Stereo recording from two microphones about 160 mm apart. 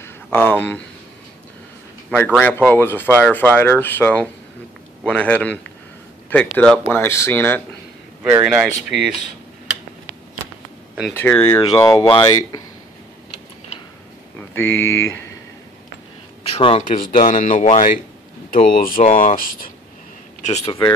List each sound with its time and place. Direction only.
0.0 s speech: 15° left (ahead or behind)
2.0 s speech: 5° left (ahead or behind)
6.8 s speech: 15° left (ahead or behind)
8.2 s speech: 5° right (ahead or behind)
11.3 s speech: 25° left (ahead or behind)
14.5 s speech: 15° left (ahead or behind)
16.5 s speech: 35° left (ahead or behind)
16.8 s speech: 55° left (ahead or behind)
18.5 s speech: 60° left (ahead or behind)
20.4 s speech: 45° left (ahead or behind)